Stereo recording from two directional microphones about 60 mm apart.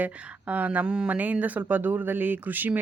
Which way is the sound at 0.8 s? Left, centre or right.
Centre.